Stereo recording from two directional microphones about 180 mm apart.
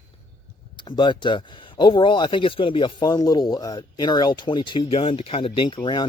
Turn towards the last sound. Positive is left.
turn(degrees=30)  # may be behind; listen again after turning